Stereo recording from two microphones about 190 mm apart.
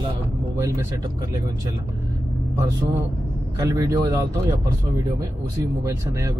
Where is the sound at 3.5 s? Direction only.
20° right (ahead or behind).